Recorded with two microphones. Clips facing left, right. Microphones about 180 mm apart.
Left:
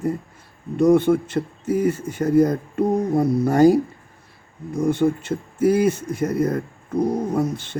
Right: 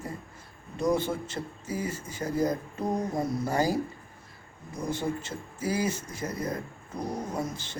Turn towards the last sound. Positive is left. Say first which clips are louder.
# left 11 dB
turn(degrees=60)  # may be behind; listen again after turning